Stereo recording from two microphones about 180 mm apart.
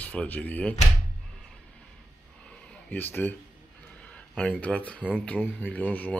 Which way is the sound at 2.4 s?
5° left (ahead or behind).